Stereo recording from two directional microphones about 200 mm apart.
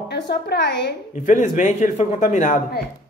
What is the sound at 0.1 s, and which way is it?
Speech, 55° left (ahead or behind).